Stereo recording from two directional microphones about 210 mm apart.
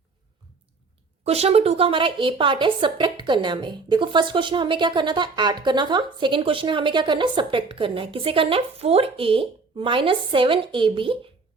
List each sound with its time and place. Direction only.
1.2 s a woman's voice: 30° right (ahead or behind)